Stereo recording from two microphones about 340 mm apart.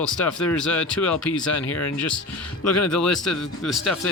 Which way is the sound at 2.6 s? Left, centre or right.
Left.